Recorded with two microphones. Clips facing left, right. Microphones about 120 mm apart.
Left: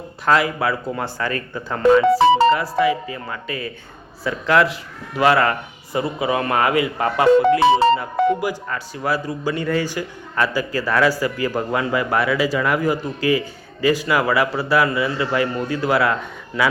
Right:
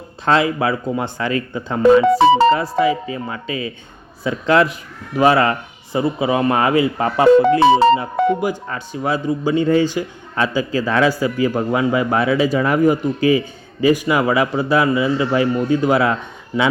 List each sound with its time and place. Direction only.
0.3 s a man's voice: 25° right (ahead or behind)